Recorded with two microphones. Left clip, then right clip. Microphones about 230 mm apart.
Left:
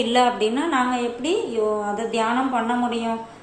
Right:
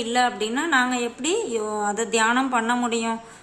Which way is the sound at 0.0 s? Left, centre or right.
Centre.